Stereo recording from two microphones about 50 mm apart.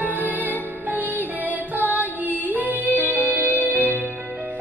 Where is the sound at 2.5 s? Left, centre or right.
Right.